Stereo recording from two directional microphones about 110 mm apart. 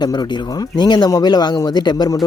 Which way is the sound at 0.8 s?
40° left (ahead or behind).